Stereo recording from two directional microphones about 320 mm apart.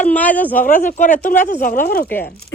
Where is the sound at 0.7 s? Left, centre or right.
Left.